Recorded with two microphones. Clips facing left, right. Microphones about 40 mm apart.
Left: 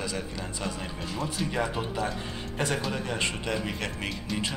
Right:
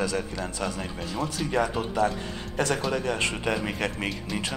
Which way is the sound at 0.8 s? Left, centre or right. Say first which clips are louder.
Right 2 dB; centre.